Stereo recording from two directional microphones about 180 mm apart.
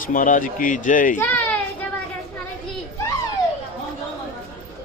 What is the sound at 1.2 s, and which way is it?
Speech, 5° left (ahead or behind).